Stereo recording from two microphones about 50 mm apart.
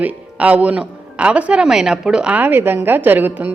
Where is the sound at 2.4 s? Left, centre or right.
Right.